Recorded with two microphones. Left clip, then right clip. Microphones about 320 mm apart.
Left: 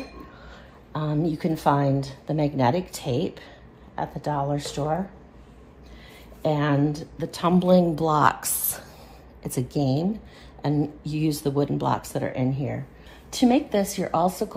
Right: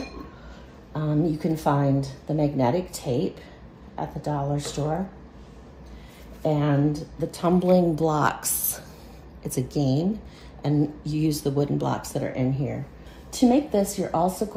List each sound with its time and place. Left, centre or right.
0.9 s speech: left
6.4 s speech: left